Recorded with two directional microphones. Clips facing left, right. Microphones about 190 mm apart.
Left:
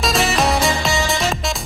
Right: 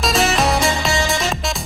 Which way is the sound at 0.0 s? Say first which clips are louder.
Right 1 dB; centre (ahead or behind).